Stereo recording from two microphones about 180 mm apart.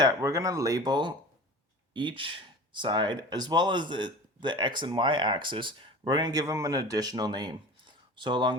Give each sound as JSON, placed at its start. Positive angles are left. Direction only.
{"t": 0.0, "sound": "speech", "side_deg": -20}